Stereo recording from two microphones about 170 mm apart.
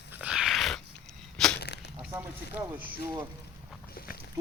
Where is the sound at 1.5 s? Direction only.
85° left.